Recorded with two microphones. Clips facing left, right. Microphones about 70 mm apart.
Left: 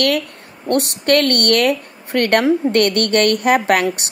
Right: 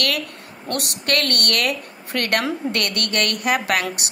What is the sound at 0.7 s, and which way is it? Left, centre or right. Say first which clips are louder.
A woman's voice: left 8 dB; left.